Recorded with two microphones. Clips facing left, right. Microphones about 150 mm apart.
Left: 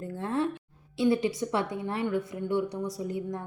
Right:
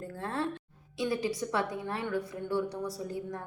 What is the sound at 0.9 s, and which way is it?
A woman's voice, 25° left (ahead or behind).